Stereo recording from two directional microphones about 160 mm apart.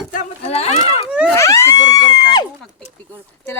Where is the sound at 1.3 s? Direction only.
20° left (ahead or behind).